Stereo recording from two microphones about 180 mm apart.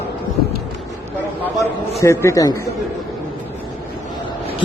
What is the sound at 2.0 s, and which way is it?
Speech, 15° left (ahead or behind).